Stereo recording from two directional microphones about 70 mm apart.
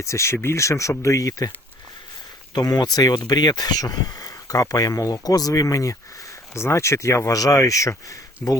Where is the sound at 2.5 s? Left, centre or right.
Left.